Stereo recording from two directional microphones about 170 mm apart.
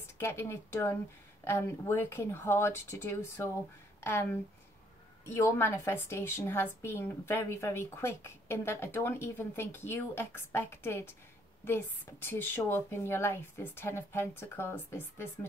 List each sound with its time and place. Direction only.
0.2 s a woman's voice: 15° left (ahead or behind)